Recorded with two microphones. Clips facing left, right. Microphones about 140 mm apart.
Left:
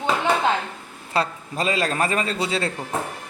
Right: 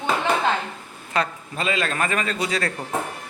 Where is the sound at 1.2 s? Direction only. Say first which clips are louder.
Left 1 dB; 30° left (ahead or behind).